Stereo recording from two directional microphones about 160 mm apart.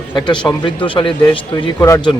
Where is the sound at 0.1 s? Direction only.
30° left (ahead or behind).